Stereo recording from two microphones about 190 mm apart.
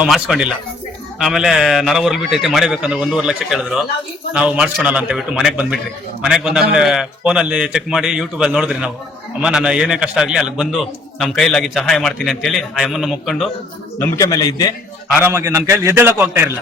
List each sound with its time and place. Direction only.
0.0 s a man's voice: 5° right (ahead or behind)
14.0 s a man's voice: 15° left (ahead or behind)
15.2 s a man's voice: 10° right (ahead or behind)